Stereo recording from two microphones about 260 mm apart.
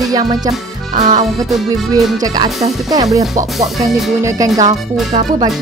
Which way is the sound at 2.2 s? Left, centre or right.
Centre.